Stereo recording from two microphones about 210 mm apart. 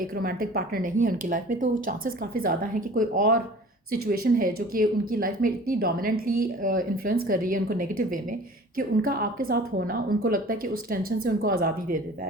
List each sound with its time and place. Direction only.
0.0 s a woman's voice: 45° right (ahead or behind)